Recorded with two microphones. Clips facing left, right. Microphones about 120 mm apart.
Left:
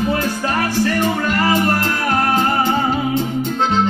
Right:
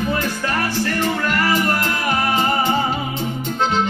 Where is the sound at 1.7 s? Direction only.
40° left (ahead or behind).